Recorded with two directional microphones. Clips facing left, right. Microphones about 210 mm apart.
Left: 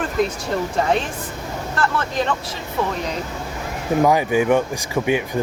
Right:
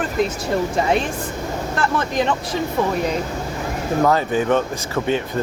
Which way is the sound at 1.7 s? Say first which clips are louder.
Right 1 dB; 15° right (ahead or behind).